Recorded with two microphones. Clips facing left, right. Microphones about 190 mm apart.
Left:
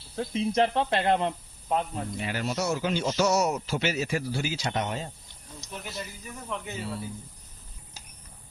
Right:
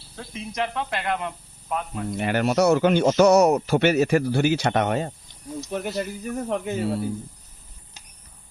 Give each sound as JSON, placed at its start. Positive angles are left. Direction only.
{"t": 0.2, "sound": "speech", "side_deg": 30}
{"t": 2.0, "sound": "speech", "side_deg": -65}